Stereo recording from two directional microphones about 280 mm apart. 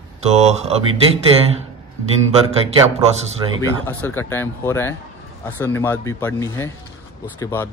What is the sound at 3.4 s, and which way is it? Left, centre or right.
Speech, centre.